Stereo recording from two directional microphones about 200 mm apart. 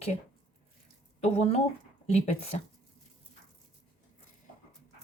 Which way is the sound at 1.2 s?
30° left (ahead or behind).